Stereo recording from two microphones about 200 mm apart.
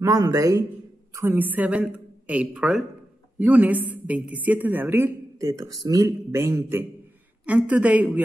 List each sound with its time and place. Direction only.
0.0 s a woman's voice: 15° right (ahead or behind)